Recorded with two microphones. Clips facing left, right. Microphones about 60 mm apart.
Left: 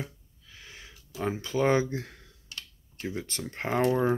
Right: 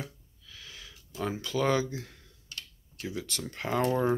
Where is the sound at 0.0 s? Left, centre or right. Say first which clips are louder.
Left 2 dB; left.